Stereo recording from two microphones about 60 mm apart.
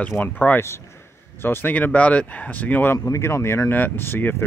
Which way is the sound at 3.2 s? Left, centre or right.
Left.